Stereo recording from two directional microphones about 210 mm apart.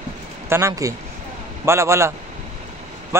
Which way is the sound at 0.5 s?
15° right (ahead or behind).